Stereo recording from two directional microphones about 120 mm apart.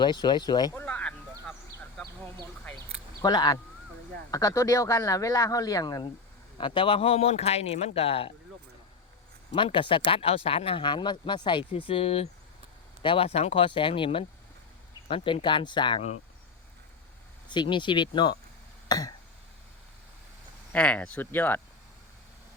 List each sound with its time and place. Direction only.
0.0 s speech: 40° left (ahead or behind)
0.7 s a sound: 15° left (ahead or behind)
3.2 s a man's voice: 35° left (ahead or behind); by 8.3 s 55° left (ahead or behind)
9.6 s speech: 45° left (ahead or behind)
17.5 s speech: 40° left (ahead or behind)
18.9 s a sound: 30° left (ahead or behind)
20.7 s speech: 10° left (ahead or behind)